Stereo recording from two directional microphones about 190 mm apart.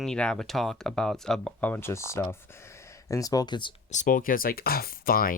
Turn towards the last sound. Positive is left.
turn(degrees=50)  # may be behind; listen again after turning